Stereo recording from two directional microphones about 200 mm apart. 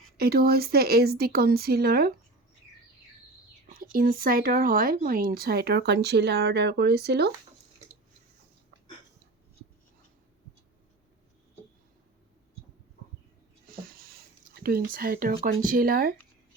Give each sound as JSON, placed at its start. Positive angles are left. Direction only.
{"t": 0.2, "sound": "speech", "side_deg": -50}
{"t": 3.8, "sound": "speech", "side_deg": -45}
{"t": 13.8, "sound": "a sound", "side_deg": -50}
{"t": 15.6, "sound": "speech", "side_deg": -45}